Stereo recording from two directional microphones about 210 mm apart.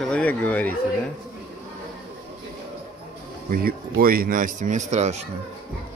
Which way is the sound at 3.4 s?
45° right (ahead or behind).